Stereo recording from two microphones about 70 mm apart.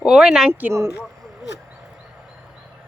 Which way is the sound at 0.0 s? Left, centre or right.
Centre.